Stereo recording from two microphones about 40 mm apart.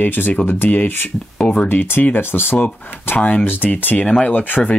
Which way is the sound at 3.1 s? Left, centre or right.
Left.